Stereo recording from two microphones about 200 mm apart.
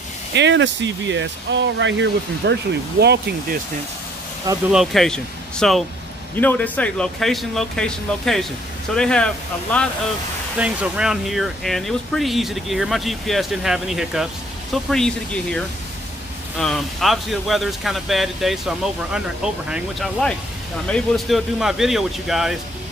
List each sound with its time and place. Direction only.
0.3 s speech: 60° right (ahead or behind)
4.6 s speech: centre (ahead or behind)